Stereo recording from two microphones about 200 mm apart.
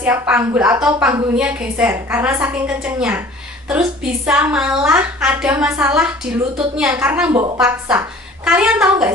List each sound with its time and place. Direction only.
0.0 s a woman's voice: 10° right (ahead or behind)
8.5 s a woman's voice: 5° right (ahead or behind)